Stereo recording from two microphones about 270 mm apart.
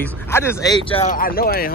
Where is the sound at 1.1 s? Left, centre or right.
Left.